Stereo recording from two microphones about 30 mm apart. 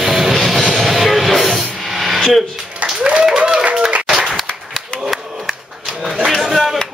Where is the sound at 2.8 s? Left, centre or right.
Right.